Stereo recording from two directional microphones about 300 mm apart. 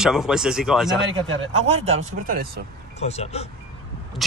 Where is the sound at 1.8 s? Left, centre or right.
Right.